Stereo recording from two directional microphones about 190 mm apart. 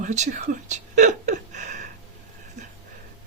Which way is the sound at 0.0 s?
40° right (ahead or behind).